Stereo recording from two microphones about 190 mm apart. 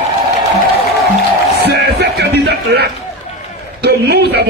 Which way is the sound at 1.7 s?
60° right (ahead or behind).